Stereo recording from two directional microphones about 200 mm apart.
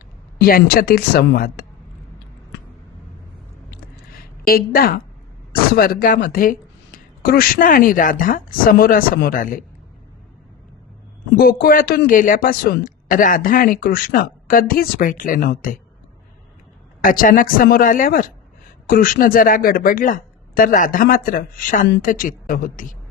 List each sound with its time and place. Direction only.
0.3 s speech: 50° left (ahead or behind)
4.1 s a sound: 50° left (ahead or behind)
5.7 s speech: 45° left (ahead or behind)
11.3 s speech: 45° left (ahead or behind)
17.0 s speech: 45° left (ahead or behind)